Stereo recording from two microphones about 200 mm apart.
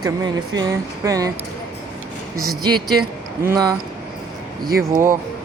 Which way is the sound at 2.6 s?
20° right (ahead or behind).